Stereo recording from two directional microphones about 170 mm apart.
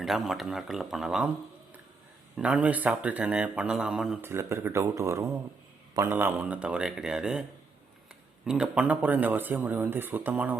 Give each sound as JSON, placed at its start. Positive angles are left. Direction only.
{"t": 0.0, "sound": "speech", "side_deg": 0}
{"t": 2.3, "sound": "speech", "side_deg": -5}
{"t": 4.2, "sound": "speech", "side_deg": -15}
{"t": 8.4, "sound": "speech", "side_deg": -5}